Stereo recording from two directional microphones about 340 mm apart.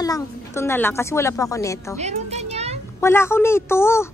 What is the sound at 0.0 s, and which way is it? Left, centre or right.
Speech, centre.